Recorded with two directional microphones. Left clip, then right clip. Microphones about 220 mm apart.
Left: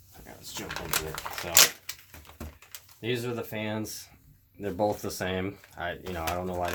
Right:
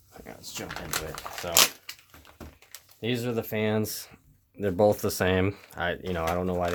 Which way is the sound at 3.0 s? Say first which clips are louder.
Right 2 dB; 45° right (ahead or behind).